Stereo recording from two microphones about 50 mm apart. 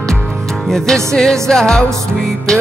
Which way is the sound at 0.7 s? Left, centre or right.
Centre.